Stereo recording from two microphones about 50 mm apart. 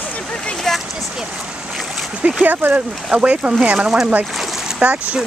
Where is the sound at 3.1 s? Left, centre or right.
Right.